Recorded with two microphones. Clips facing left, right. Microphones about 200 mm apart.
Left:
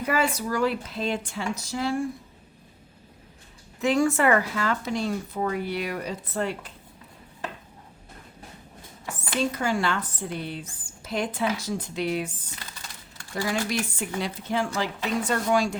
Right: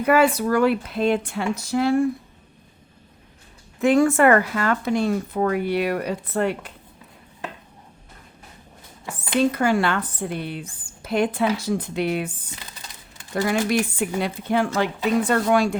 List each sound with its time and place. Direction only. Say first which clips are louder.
0.0 s speech: right 8 dB; 60° right (ahead or behind)
3.8 s speech: right 5 dB; 55° right (ahead or behind)
9.5 s speech: right 5 dB; 60° right (ahead or behind)
13.3 s speech: right 6 dB; 60° right (ahead or behind)